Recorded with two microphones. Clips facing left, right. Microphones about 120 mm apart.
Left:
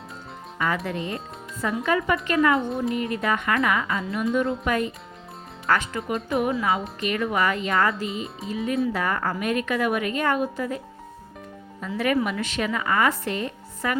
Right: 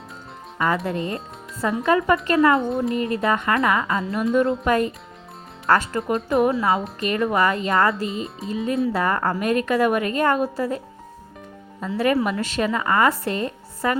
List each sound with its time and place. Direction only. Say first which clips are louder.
0.9 s a woman's voice: right 3 dB; 35° right (ahead or behind)
2.6 s music: right 3 dB; centre (ahead or behind)
2.9 s a woman's voice: right 3 dB; 35° right (ahead or behind)
6.1 s music: right 4 dB; centre (ahead or behind)
6.4 s a woman's voice: right 4 dB; 35° right (ahead or behind)
8.2 s music: right 3 dB; centre (ahead or behind)
8.9 s a woman's voice: right 4 dB; 35° right (ahead or behind)
11.8 s a woman's voice: right 3 dB; 30° right (ahead or behind)